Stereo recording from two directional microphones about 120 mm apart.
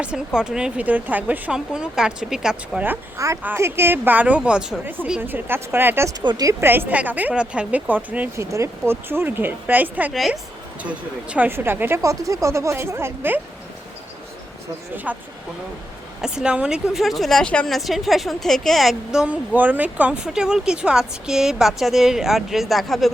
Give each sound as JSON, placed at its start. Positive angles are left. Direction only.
{"t": 0.3, "sound": "speech", "side_deg": -5}
{"t": 3.4, "sound": "speech", "side_deg": -20}
{"t": 6.2, "sound": "speech", "side_deg": -30}
{"t": 8.4, "sound": "speech", "side_deg": -25}
{"t": 10.1, "sound": "speech", "side_deg": 0}
{"t": 10.8, "sound": "speech", "side_deg": -10}
{"t": 14.9, "sound": "speech", "side_deg": -15}
{"t": 16.2, "sound": "speech", "side_deg": -5}